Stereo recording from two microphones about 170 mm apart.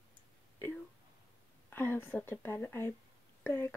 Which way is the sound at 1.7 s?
10° left (ahead or behind).